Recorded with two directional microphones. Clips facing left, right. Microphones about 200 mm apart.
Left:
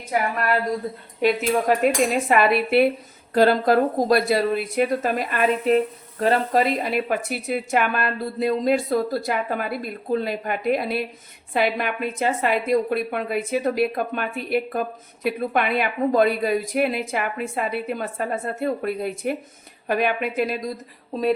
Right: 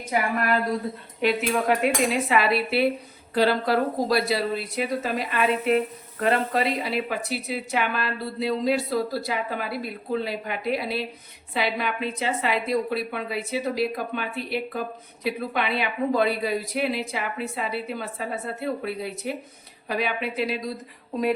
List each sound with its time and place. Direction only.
1.2 s speech: 45° left (ahead or behind)